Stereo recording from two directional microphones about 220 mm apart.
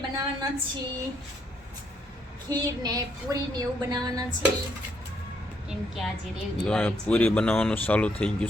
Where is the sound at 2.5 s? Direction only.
15° right (ahead or behind).